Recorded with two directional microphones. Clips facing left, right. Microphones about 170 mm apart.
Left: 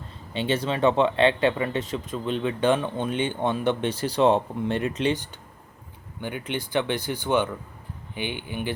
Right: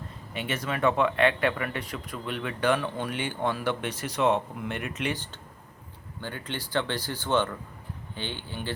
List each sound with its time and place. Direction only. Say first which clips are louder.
0.3 s speech: left 6 dB; 30° left (ahead or behind)
6.1 s speech: left 5 dB; 15° left (ahead or behind)